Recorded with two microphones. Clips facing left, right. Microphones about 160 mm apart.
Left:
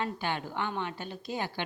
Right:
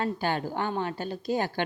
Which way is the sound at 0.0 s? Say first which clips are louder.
Right 5 dB; 40° right (ahead or behind).